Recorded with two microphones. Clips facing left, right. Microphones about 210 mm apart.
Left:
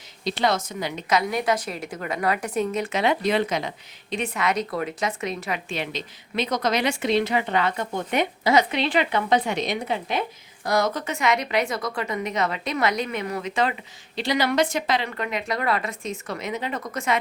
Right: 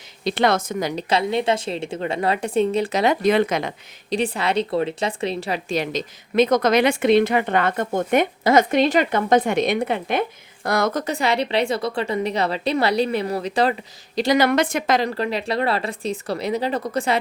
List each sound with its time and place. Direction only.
0.3 s speech: 60° right (ahead or behind); by 1.0 s 45° right (ahead or behind)
1.1 s a woman's voice: 25° right (ahead or behind); by 3.8 s 55° right (ahead or behind)
4.1 s speech: 30° right (ahead or behind); by 11.0 s 55° right (ahead or behind)
11.0 s a woman's voice: 35° right (ahead or behind)
14.2 s a woman's voice: 45° right (ahead or behind)